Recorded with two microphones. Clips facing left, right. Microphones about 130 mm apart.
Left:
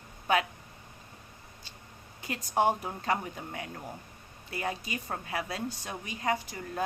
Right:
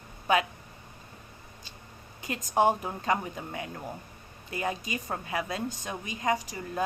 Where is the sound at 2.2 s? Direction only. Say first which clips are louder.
Right 3 dB; 20° right (ahead or behind).